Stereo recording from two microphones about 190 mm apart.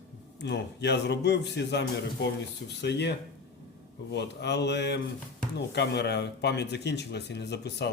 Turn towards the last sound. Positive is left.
turn(degrees=60)  # may be behind; listen again after turning